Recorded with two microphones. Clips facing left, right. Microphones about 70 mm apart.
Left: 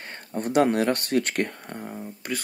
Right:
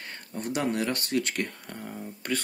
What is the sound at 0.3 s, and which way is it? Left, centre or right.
Speech, left.